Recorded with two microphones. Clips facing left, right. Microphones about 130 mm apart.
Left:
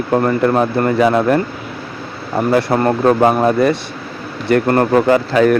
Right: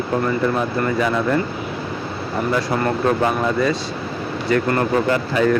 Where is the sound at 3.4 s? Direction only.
60° left (ahead or behind).